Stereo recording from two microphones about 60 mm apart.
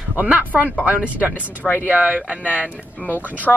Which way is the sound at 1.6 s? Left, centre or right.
Left.